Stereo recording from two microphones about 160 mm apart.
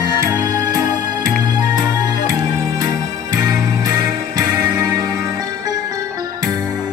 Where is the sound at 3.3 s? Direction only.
25° right (ahead or behind).